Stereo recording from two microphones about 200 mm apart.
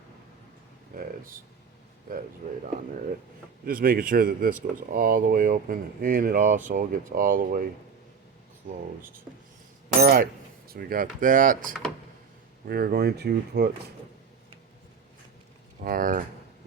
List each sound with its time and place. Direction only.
0.9 s speech: 45° right (ahead or behind)
2.4 s speech: 40° right (ahead or behind)
3.7 s speech: 45° right (ahead or behind)
10.0 s speech: 50° right (ahead or behind)
15.8 s speech: 45° right (ahead or behind)